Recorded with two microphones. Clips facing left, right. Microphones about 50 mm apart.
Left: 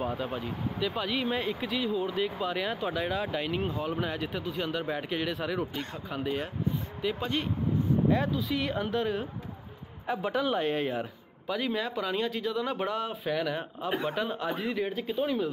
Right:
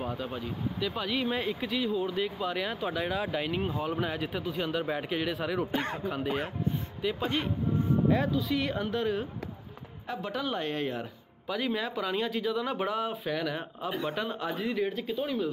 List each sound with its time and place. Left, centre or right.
0.0 s speech: centre
5.7 s speech: right
7.0 s speech: centre